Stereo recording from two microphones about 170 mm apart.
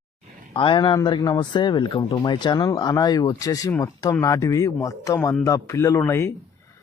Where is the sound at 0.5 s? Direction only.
30° left (ahead or behind); by 6.3 s 15° left (ahead or behind).